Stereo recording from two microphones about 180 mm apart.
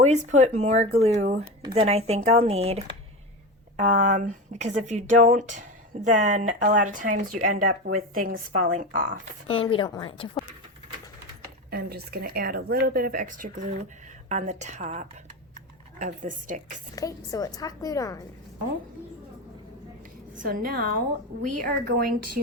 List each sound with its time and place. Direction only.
0.0 s speech: 40° right (ahead or behind)
9.5 s a woman's voice: 30° left (ahead or behind)
11.7 s speech: 60° right (ahead or behind); by 16.8 s 45° right (ahead or behind)
16.9 s a woman's voice: 20° left (ahead or behind)
20.4 s speech: 50° right (ahead or behind)